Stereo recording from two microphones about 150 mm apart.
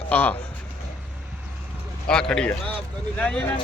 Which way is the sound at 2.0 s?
5° left (ahead or behind).